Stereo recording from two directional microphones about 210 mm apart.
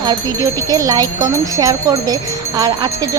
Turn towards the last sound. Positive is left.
turn(degrees=-15)  # may be behind; listen again after turning